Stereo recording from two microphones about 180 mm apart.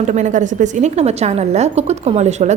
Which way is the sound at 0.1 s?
40° right (ahead or behind).